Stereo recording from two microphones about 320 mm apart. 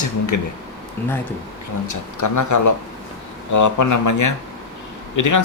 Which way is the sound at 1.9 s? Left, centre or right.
Left.